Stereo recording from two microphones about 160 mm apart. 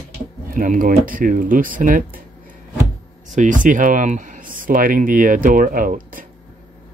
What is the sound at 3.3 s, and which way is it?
Speech, 55° right (ahead or behind).